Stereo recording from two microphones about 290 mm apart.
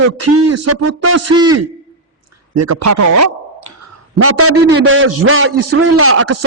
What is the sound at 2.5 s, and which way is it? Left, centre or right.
Speech, right.